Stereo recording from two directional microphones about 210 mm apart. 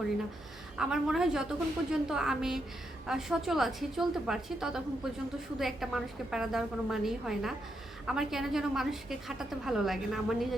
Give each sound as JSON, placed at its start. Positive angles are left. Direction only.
{"t": 0.8, "sound": "a woman's voice", "side_deg": -5}